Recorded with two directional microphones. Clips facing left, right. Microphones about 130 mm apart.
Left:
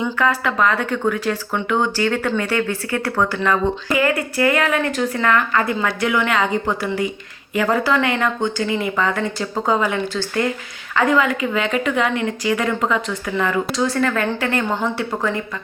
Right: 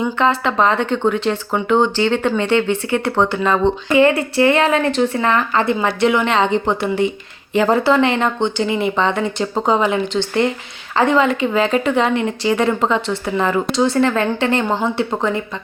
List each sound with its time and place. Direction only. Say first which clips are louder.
0.0 s speech: right 3 dB; 25° right (ahead or behind)